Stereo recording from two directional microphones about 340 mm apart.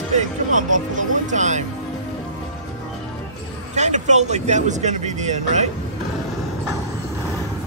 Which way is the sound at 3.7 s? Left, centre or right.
Centre.